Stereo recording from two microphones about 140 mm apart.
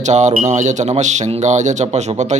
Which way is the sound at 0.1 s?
55° right (ahead or behind).